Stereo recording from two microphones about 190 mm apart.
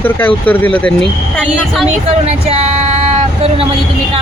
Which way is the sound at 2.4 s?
30° right (ahead or behind).